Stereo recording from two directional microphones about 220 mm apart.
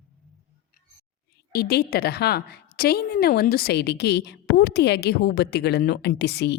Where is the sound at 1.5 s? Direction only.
45° left (ahead or behind).